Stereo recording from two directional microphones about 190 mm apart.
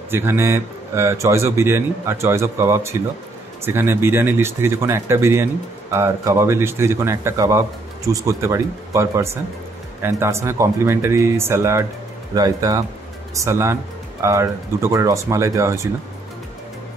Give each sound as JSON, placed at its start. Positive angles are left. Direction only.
{"t": 0.1, "sound": "speech", "side_deg": -15}